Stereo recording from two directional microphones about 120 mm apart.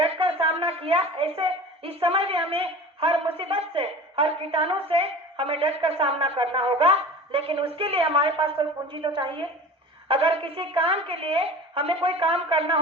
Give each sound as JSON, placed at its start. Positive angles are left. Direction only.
{"t": 0.0, "sound": "a woman's voice", "side_deg": -50}